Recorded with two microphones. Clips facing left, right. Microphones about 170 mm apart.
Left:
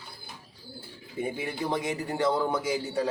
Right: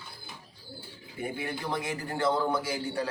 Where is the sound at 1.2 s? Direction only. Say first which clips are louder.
Left 3 dB; 20° left (ahead or behind).